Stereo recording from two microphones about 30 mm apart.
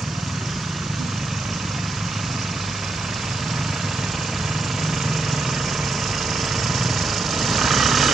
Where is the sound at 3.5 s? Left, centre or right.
Centre.